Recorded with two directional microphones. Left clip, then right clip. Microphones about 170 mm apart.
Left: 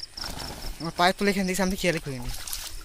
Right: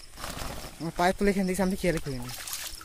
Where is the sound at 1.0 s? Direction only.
15° right (ahead or behind).